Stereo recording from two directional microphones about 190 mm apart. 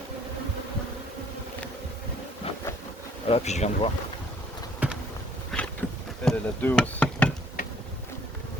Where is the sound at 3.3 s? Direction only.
35° left (ahead or behind).